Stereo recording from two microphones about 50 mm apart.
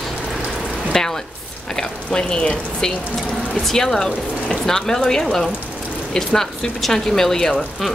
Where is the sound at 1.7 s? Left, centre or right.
Centre.